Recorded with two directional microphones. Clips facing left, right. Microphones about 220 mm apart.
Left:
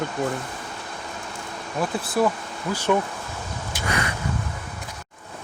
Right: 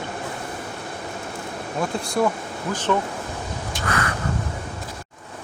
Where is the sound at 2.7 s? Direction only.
10° left (ahead or behind).